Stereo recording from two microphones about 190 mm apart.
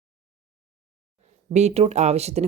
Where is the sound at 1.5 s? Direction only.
35° right (ahead or behind).